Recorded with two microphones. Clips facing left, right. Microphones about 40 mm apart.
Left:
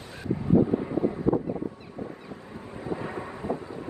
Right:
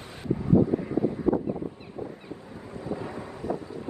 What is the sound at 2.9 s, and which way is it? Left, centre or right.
Thunder, left.